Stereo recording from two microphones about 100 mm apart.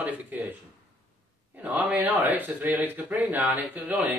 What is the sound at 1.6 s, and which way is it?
Speech, 15° right (ahead or behind).